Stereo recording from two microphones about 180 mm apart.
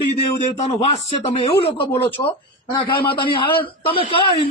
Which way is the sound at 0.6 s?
30° left (ahead or behind).